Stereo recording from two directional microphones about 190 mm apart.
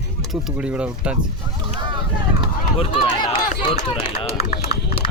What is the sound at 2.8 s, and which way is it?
Speech, 25° left (ahead or behind).